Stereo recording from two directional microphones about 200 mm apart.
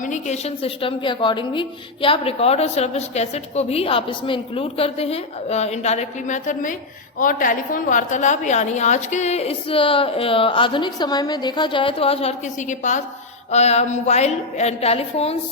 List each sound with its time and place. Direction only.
0.0 s a woman's voice: 35° left (ahead or behind)